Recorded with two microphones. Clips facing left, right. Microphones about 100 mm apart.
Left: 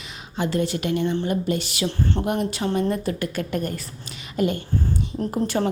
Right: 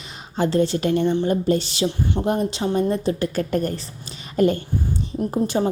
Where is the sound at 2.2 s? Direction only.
30° right (ahead or behind).